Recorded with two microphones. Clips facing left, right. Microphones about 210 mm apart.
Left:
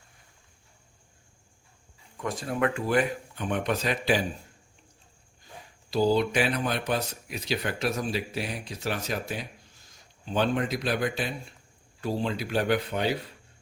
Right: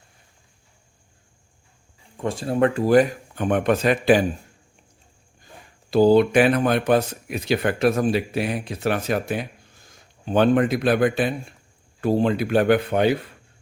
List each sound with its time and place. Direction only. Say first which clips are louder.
2.1 s speech: right 7 dB; 30° right (ahead or behind); by 4.3 s 55° right (ahead or behind)
5.9 s speech: right 9 dB; 55° right (ahead or behind)